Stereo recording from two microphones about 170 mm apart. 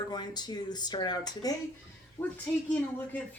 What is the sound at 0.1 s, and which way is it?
A woman's voice, 25° left (ahead or behind).